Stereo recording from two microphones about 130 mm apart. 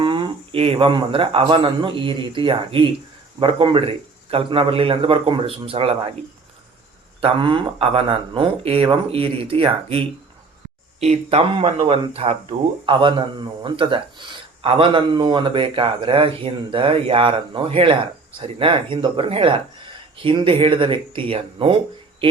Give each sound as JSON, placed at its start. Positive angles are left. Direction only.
{"t": 0.0, "sound": "speech", "side_deg": -40}
{"t": 7.2, "sound": "speech", "side_deg": -40}
{"t": 11.0, "sound": "speech", "side_deg": -50}